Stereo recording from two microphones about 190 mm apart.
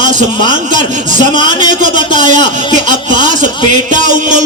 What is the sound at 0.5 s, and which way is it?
Speech, 40° right (ahead or behind).